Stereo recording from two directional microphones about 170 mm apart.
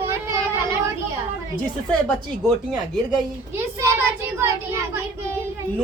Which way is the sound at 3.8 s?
15° right (ahead or behind).